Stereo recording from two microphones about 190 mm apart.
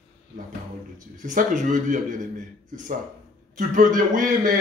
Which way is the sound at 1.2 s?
40° right (ahead or behind).